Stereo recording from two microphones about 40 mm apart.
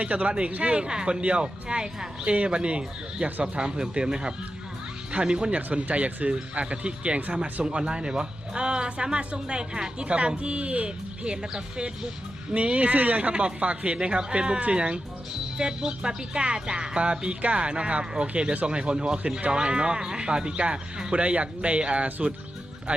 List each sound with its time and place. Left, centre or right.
0.0 s speech: right
0.8 s speech: right